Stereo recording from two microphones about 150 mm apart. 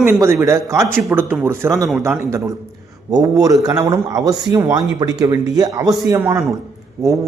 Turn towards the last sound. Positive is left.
turn(degrees=-20)  # may be behind; listen again after turning